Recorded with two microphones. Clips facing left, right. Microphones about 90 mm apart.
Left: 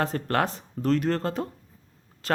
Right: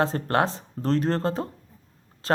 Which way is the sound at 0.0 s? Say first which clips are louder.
Right 2 dB; 30° right (ahead or behind).